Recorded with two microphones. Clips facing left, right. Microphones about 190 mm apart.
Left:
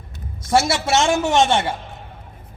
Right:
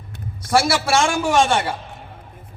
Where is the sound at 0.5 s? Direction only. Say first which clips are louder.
Even; 25° left (ahead or behind).